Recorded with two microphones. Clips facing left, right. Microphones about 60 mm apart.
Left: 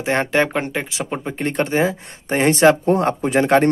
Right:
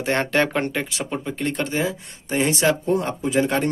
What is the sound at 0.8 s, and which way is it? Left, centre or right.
Speech, left.